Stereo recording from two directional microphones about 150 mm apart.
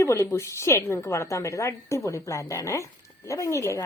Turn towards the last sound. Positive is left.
turn(degrees=20)  # may be behind; listen again after turning